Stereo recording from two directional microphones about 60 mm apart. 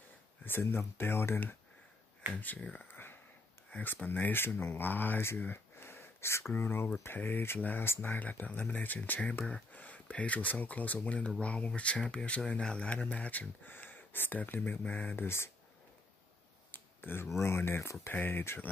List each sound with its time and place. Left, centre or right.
0.5 s speech: left
2.3 s speech: left
2.9 s a sound: left
3.8 s speech: left
5.4 s a sound: left
6.5 s speech: left
12.0 s speech: centre
12.4 s speech: centre
15.1 s speech: left
16.7 s a sound: left
17.4 s speech: left